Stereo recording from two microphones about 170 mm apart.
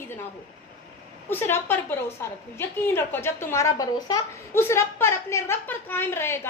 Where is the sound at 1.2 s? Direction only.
15° left (ahead or behind).